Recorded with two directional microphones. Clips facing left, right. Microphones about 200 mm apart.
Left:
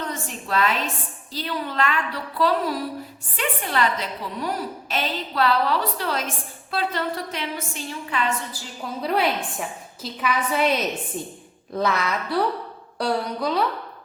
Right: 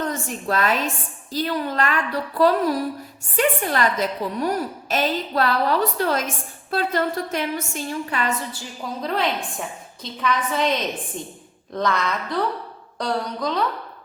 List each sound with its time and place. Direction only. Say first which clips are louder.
0.0 s a sound: right 5 dB; 45° right (ahead or behind)
1.3 s a woman's voice: right 5 dB; 45° right (ahead or behind)
8.8 s a woman's voice: left 1 dB; 5° left (ahead or behind)